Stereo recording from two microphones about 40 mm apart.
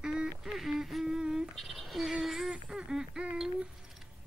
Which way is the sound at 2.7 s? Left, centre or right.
Centre.